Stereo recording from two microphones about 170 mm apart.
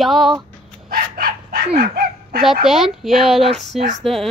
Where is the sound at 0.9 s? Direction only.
60° right (ahead or behind).